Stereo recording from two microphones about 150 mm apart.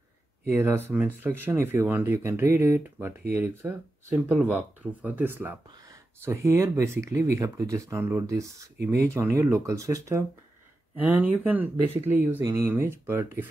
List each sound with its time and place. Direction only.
0.5 s speech: 15° right (ahead or behind)
5.0 s speech: 10° right (ahead or behind)